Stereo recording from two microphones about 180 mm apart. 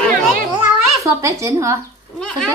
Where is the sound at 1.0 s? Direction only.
15° right (ahead or behind).